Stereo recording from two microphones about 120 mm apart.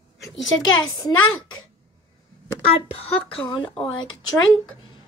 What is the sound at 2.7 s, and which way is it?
Speech, 55° left (ahead or behind).